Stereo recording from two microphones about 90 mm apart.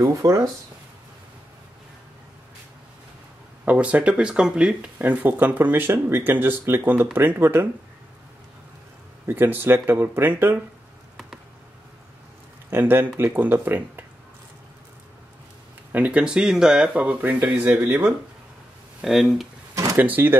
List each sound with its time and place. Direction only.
0.0 s speech: 35° right (ahead or behind)
3.6 s speech: 15° right (ahead or behind)
9.2 s speech: 25° right (ahead or behind)
12.6 s a man's voice: 25° right (ahead or behind)
15.9 s speech: 15° right (ahead or behind)
18.9 s speech: 5° right (ahead or behind)
19.7 s drawer open or close: 40° right (ahead or behind)
20.0 s speech: 20° right (ahead or behind)